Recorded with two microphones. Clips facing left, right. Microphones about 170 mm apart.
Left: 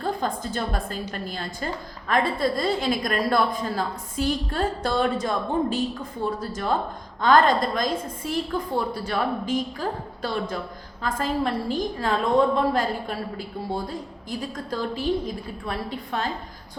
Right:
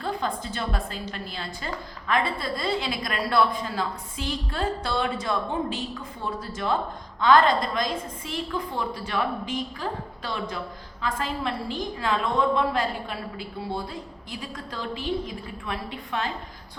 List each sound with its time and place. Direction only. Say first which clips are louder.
0.0 s a woman's voice: left 2 dB; 45° left (ahead or behind)
11.0 s a woman's voice: left 4 dB; 45° left (ahead or behind)